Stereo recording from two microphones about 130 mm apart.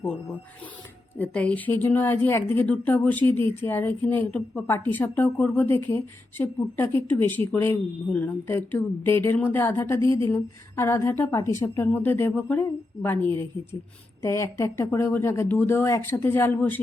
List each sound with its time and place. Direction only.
0.0 s speech: 10° left (ahead or behind)